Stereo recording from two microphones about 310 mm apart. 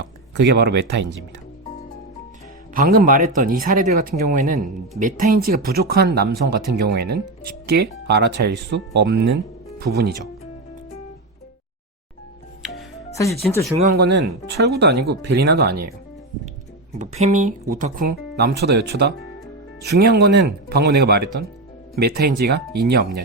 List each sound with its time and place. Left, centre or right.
0.0 s speech: right
2.7 s speech: right
13.1 s speech: centre
13.7 s speech: right
17.0 s speech: right